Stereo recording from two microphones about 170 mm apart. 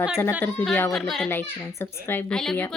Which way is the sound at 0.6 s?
5° left (ahead or behind).